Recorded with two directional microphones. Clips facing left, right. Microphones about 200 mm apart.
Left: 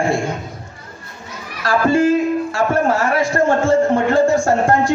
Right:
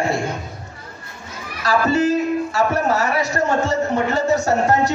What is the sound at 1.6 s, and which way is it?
Speech, 50° left (ahead or behind).